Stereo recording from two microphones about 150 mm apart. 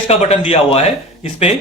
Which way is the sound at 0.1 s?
45° left (ahead or behind).